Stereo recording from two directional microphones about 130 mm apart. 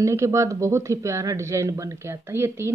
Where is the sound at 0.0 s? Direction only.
25° right (ahead or behind).